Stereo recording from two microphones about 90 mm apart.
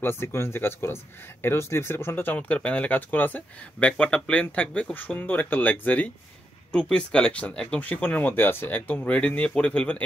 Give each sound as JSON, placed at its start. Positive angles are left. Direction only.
{"t": 0.0, "sound": "speech", "side_deg": 25}